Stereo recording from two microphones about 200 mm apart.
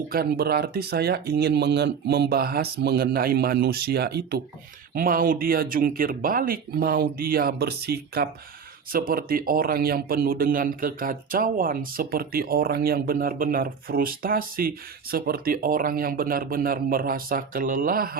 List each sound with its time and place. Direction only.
0.1 s a man's voice: 50° right (ahead or behind)